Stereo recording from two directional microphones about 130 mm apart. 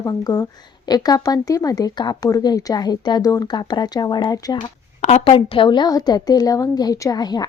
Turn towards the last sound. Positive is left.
turn(degrees=30)  # may be behind; listen again after turning